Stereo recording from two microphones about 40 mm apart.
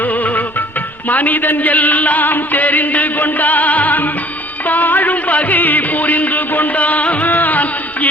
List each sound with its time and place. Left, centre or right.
0.0 s music: left
1.0 s a sound: left
4.7 s music: left